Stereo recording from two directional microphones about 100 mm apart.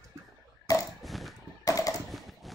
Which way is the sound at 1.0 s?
Centre (ahead or behind).